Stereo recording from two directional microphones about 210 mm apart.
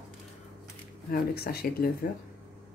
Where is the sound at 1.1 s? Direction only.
45° left (ahead or behind).